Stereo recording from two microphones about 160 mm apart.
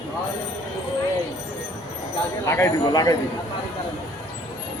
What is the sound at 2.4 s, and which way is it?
Speech, 15° left (ahead or behind).